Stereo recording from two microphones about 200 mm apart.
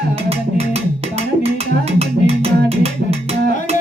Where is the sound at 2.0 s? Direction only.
30° right (ahead or behind).